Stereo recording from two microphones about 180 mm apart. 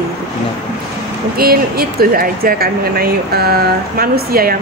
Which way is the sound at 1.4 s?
55° right (ahead or behind).